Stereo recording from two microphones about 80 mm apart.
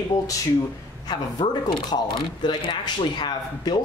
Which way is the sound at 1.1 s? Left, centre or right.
Left.